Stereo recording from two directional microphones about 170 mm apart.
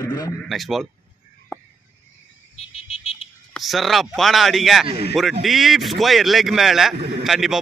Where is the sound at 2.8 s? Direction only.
35° left (ahead or behind).